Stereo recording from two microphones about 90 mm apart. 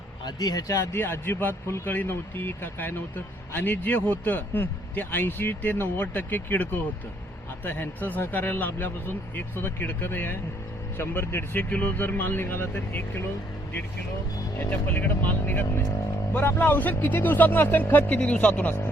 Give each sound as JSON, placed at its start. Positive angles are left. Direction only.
{"t": 0.3, "sound": "speech", "side_deg": 45}
{"t": 1.0, "sound": "speech", "side_deg": 25}
{"t": 14.7, "sound": "speech", "side_deg": 20}